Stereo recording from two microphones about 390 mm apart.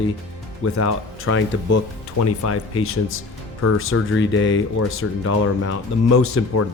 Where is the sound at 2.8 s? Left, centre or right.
Left.